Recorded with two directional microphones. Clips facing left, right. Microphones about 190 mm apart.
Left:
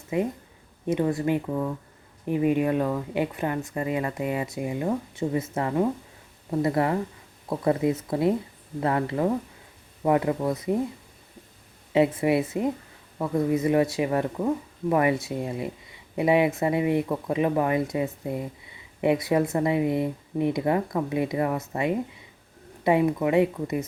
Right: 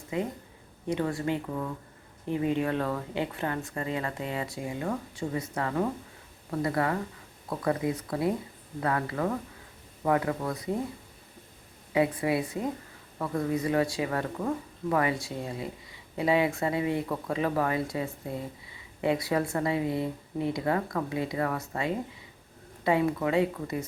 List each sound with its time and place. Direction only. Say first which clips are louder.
0.1 s a woman's voice: left 5 dB; 20° left (ahead or behind)
11.9 s speech: left 5 dB; 25° left (ahead or behind)